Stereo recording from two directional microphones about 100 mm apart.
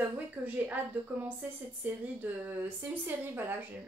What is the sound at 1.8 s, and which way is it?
Speech, 20° right (ahead or behind).